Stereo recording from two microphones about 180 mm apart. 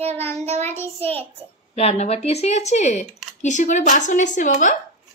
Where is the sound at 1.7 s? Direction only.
35° left (ahead or behind).